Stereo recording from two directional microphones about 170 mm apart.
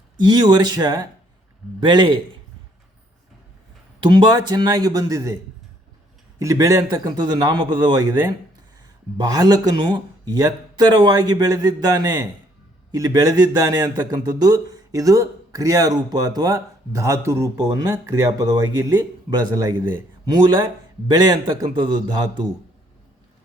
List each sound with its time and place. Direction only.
0.2 s speech: 25° right (ahead or behind)
4.0 s speech: 25° right (ahead or behind)
6.4 s speech: 20° right (ahead or behind)